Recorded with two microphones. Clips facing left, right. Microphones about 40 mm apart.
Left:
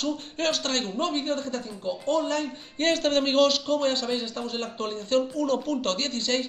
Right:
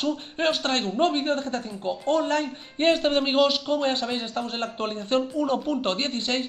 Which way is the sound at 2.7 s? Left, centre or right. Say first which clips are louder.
Right 2 dB; centre.